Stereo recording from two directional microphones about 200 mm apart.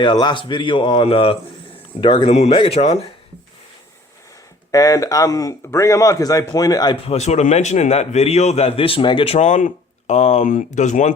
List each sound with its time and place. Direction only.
0.0 s a man's voice: 20° left (ahead or behind)
4.7 s speech: 15° left (ahead or behind); by 11.1 s 35° left (ahead or behind)